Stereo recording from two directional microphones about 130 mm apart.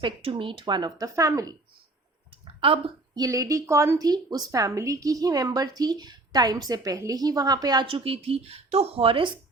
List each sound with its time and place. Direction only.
0.0 s speech: 40° right (ahead or behind); by 1.5 s 25° right (ahead or behind)
2.4 s a sound: 45° right (ahead or behind)
3.2 s a woman's voice: 30° right (ahead or behind); by 9.3 s 45° right (ahead or behind)